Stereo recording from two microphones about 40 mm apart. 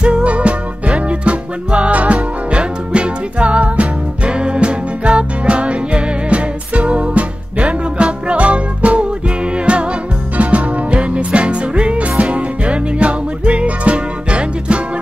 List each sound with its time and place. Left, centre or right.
0.0 s music: right